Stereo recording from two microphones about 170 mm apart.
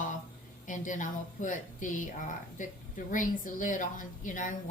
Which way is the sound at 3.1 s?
50° left (ahead or behind).